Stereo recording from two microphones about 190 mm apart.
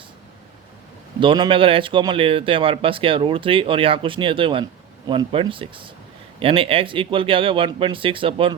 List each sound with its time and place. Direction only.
1.2 s speech: 25° right (ahead or behind)